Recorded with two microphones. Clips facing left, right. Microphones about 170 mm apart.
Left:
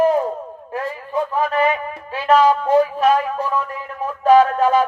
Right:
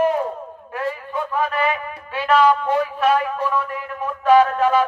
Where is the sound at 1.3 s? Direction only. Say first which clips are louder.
Left 2 dB; 35° left (ahead or behind).